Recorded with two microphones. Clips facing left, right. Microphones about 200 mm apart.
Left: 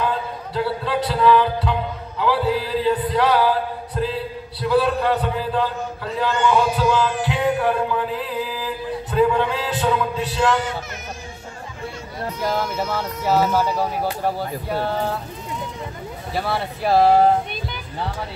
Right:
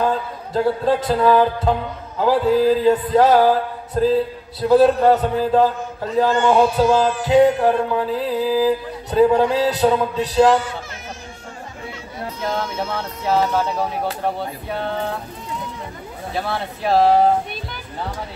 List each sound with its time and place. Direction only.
0.5 s speech: 45° right (ahead or behind)
6.1 s music: 40° right (ahead or behind)
12.4 s speech: centre (ahead or behind)
16.3 s speech: 5° left (ahead or behind)